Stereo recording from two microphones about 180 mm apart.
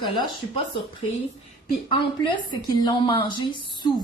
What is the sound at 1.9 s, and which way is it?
A woman's voice, 25° left (ahead or behind).